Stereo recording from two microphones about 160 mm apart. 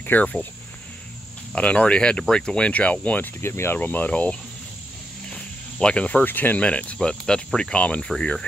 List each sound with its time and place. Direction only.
0.0 s speech: 10° left (ahead or behind)
1.5 s speech: 5° left (ahead or behind)